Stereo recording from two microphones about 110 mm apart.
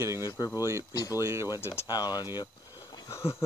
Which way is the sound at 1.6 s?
25° left (ahead or behind).